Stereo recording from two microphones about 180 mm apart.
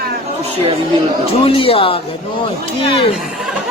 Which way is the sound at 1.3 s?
30° left (ahead or behind).